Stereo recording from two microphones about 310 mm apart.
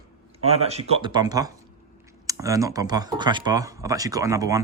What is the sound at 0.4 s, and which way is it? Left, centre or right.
Speech, centre.